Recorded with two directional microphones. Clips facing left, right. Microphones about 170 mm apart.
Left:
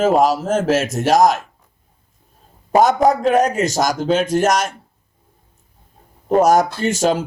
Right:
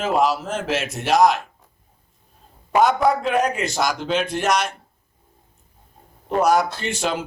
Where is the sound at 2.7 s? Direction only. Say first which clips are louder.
Left 4 dB; 40° left (ahead or behind).